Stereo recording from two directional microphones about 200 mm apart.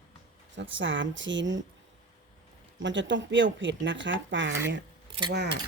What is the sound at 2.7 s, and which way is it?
Speech, 65° right (ahead or behind).